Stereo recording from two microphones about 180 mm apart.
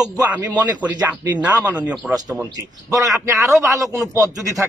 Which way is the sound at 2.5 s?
20° right (ahead or behind).